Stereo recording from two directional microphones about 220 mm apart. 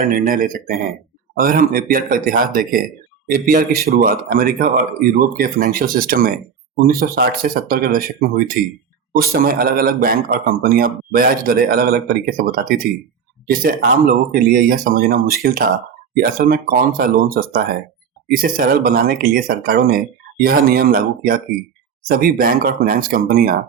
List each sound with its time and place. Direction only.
0.0 s a man's voice: 40° right (ahead or behind)